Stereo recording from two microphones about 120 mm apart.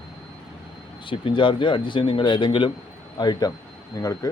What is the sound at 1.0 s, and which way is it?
Speech, 45° left (ahead or behind).